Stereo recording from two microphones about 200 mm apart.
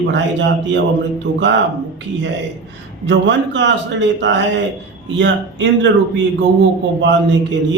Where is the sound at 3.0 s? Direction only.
65° right (ahead or behind).